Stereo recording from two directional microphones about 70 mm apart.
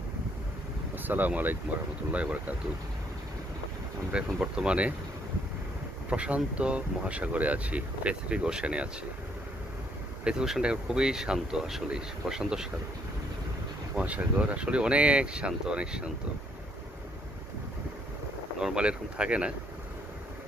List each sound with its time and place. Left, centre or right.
0.9 s speech: right
4.4 s speech: centre
6.1 s speech: centre
10.2 s speech: centre
13.9 s speech: centre
18.6 s speech: centre